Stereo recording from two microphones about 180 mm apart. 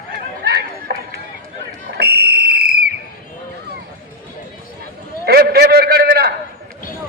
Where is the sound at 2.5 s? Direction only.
60° right (ahead or behind).